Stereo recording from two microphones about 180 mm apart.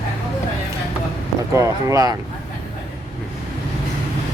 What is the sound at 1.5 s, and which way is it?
Speech, 15° right (ahead or behind).